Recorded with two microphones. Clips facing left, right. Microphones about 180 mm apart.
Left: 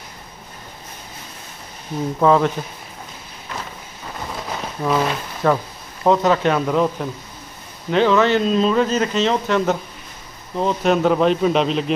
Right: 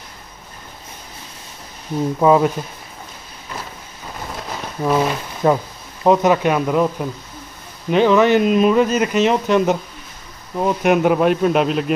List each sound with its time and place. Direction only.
2.1 s speech: 10° right (ahead or behind)
4.8 s speech: 10° right (ahead or behind)